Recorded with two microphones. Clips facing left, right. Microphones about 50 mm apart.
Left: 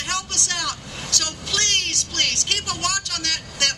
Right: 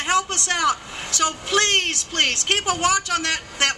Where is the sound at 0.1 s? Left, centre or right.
Right.